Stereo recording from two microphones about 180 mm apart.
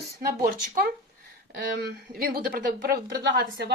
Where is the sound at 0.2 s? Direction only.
55° right (ahead or behind).